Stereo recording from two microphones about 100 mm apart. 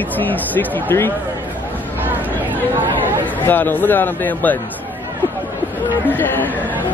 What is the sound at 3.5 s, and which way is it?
Speech, 20° left (ahead or behind).